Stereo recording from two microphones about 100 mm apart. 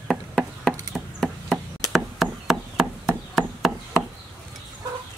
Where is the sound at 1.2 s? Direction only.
5° left (ahead or behind).